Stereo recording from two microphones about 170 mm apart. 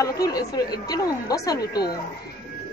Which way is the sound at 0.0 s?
20° left (ahead or behind).